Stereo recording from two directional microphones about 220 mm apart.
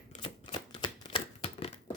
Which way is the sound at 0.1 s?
25° left (ahead or behind).